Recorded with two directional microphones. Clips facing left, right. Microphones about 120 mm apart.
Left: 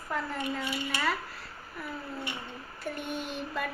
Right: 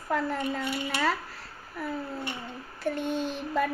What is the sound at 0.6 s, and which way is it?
Speech, 65° right (ahead or behind).